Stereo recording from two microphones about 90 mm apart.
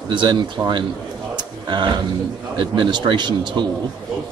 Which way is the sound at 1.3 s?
55° right (ahead or behind).